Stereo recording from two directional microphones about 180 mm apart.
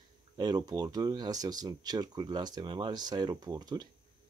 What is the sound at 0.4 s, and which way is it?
Speech, 25° right (ahead or behind).